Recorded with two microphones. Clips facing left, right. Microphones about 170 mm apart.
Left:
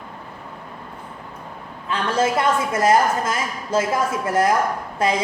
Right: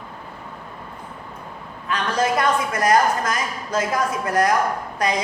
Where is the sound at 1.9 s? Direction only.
25° left (ahead or behind).